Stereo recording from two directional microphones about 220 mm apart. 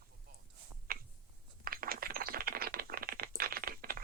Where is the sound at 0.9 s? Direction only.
40° right (ahead or behind).